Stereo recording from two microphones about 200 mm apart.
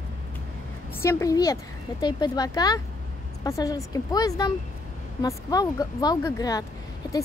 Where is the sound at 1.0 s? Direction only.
15° left (ahead or behind).